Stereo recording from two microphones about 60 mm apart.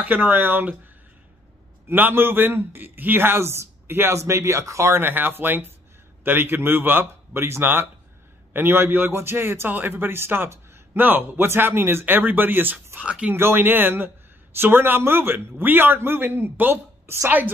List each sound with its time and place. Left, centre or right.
0.0 s a man's voice: right
1.9 s a man's voice: right
5.1 s a man's voice: right
12.9 s speech: centre
13.3 s a man's voice: right